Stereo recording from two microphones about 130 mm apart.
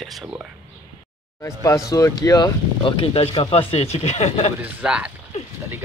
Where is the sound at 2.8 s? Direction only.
45° left (ahead or behind).